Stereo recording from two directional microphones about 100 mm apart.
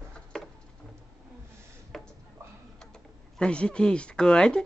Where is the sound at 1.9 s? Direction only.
Centre (ahead or behind).